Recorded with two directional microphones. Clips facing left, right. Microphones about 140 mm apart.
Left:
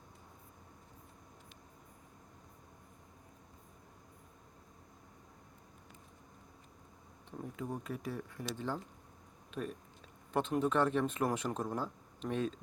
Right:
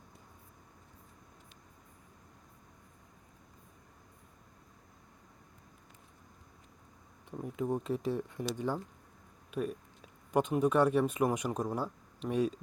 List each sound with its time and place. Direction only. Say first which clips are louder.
7.3 s speech: right 7 dB; 20° right (ahead or behind)